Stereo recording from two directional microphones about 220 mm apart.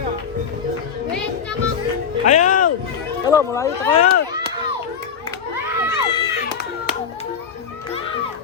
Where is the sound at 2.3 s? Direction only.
35° left (ahead or behind).